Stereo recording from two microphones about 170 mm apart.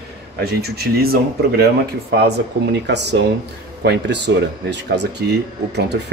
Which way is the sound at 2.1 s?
85° right.